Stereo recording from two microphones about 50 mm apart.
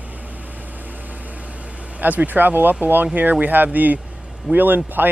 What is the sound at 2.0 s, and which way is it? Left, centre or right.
Speech, right.